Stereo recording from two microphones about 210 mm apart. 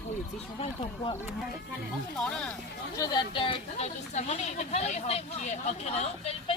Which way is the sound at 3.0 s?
20° left (ahead or behind).